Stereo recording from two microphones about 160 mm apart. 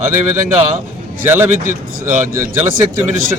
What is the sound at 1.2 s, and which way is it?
Speech, 15° right (ahead or behind).